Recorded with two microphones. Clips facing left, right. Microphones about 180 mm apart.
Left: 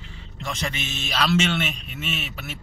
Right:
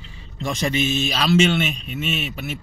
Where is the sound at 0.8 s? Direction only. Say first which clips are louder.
Right 5 dB; centre (ahead or behind).